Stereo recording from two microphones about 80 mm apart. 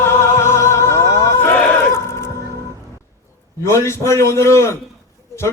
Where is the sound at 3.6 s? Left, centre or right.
Left.